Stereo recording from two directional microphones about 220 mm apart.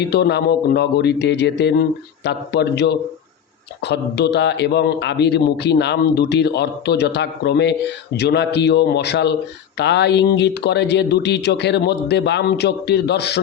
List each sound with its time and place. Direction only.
0.0 s speech: 50° left (ahead or behind)